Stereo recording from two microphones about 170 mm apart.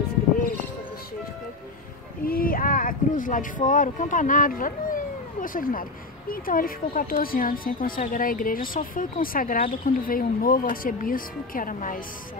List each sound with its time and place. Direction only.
2.2 s speech: 60° left (ahead or behind)